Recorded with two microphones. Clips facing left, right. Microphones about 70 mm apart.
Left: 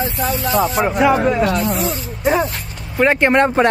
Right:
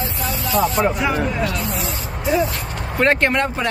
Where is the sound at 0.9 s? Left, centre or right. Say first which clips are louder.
Left 7 dB; left.